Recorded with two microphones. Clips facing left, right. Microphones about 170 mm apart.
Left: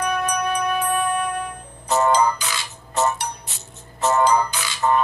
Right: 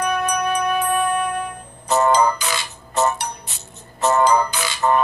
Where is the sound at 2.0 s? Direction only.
60° right (ahead or behind).